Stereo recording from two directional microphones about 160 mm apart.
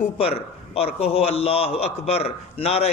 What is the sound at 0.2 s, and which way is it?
A man's voice, 40° left (ahead or behind).